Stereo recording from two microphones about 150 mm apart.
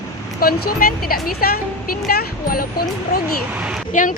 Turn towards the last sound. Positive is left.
turn(degrees=60)  # may be behind; listen again after turning